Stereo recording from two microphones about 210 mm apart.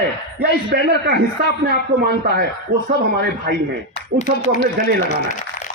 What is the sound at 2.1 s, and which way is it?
A man's voice, 50° right (ahead or behind).